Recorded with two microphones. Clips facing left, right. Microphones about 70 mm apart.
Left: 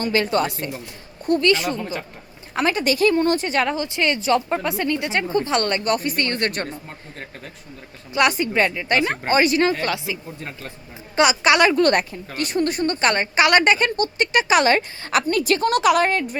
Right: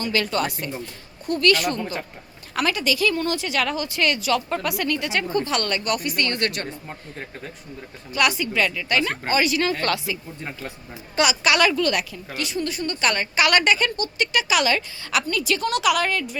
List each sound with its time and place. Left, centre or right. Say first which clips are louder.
0.0 s a woman's voice: left 3 dB; left
1.8 s a man's voice: even; centre
2.6 s a woman's voice: left 3 dB; left
3.7 s a woman's voice: left 2 dB; left
8.3 s a woman's voice: left 3 dB; left
9.7 s speech: even; centre
11.2 s a woman's voice: left 3 dB; left
11.8 s a woman's voice: left 5 dB; left